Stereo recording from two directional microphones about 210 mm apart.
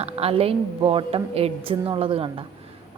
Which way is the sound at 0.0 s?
30° right (ahead or behind).